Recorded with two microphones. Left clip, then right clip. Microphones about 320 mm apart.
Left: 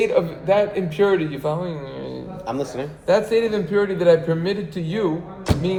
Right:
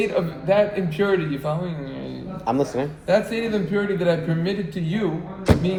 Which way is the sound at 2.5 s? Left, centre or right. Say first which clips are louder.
Right 4 dB; centre.